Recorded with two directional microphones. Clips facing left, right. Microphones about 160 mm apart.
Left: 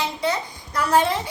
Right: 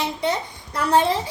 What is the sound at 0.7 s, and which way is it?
Speech, 30° right (ahead or behind).